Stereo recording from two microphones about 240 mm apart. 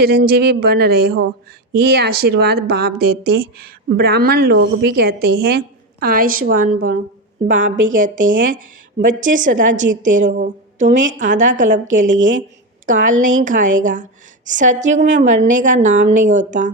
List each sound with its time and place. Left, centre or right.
0.0 s a woman's voice: right